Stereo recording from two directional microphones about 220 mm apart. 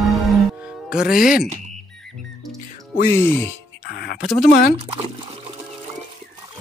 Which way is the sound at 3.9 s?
45° left (ahead or behind).